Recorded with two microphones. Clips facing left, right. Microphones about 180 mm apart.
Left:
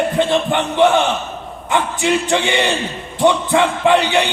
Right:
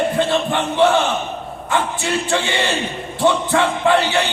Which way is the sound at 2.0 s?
20° left (ahead or behind).